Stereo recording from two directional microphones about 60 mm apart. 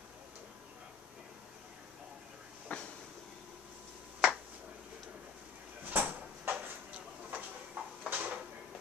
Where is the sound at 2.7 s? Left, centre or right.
Left.